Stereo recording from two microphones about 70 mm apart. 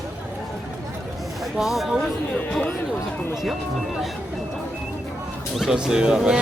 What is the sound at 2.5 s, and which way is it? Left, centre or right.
Speech, centre.